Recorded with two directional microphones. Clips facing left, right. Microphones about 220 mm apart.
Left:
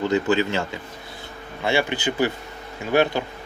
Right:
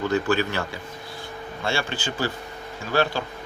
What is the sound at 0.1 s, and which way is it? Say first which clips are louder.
Speech: left 3 dB; 20° left (ahead or behind).